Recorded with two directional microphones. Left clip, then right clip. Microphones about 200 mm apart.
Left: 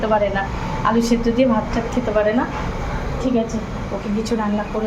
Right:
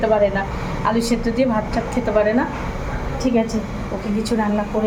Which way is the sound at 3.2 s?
10° right (ahead or behind).